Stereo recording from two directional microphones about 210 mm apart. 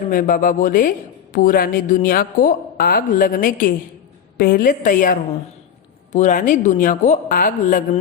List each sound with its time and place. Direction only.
0.1 s a woman's voice: 40° left (ahead or behind)
6.1 s speech: 35° left (ahead or behind)